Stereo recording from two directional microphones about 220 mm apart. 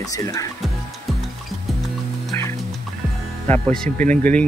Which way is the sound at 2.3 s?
10° left (ahead or behind).